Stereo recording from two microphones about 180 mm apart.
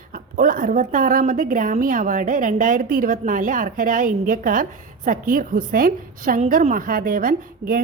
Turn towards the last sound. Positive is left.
turn(degrees=-50)  # may be behind; listen again after turning